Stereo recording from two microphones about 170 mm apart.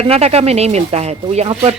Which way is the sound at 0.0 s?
35° right (ahead or behind).